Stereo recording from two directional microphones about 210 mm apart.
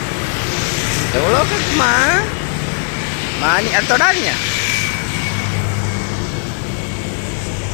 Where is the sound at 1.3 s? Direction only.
5° left (ahead or behind).